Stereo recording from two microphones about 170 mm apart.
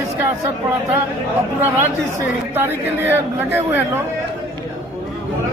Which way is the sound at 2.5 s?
15° right (ahead or behind).